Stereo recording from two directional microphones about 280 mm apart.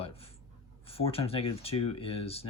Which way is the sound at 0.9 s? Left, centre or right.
Left.